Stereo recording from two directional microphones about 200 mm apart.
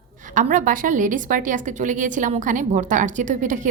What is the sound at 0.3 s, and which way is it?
A woman's voice, 40° right (ahead or behind).